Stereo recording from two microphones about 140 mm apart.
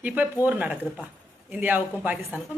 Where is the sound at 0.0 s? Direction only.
10° right (ahead or behind).